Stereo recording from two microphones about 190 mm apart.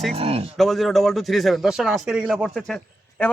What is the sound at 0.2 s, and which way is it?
Speech, 30° right (ahead or behind).